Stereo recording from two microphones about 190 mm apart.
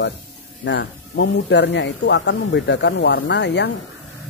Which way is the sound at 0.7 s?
70° left (ahead or behind).